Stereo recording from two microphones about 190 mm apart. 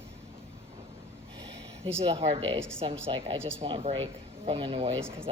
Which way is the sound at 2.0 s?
30° right (ahead or behind).